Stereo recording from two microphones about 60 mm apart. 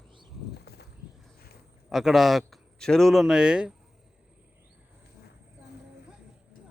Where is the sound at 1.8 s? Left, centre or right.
Centre.